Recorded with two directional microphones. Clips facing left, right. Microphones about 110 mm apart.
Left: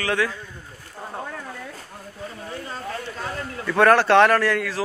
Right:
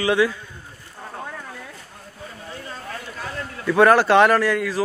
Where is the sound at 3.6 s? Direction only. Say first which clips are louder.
Right 2 dB; 5° right (ahead or behind).